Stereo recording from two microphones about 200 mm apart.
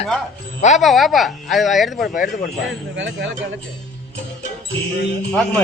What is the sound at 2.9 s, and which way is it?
Speech, 65° right (ahead or behind).